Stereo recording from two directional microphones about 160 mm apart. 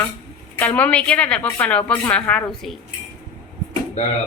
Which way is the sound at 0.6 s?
10° left (ahead or behind).